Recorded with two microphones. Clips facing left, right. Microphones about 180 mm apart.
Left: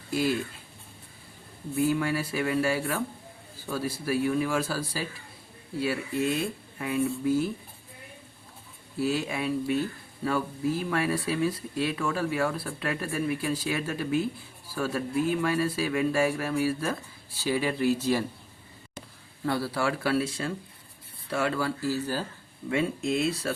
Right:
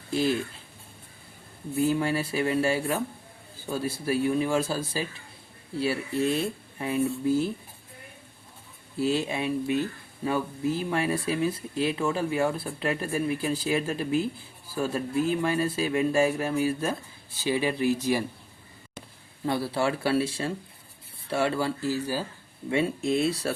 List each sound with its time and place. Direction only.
0.1 s speech: 25° right (ahead or behind)
1.8 s speech: 25° right (ahead or behind)
9.0 s speech: 25° right (ahead or behind)
19.5 s speech: 20° right (ahead or behind)
22.7 s speech: 30° right (ahead or behind)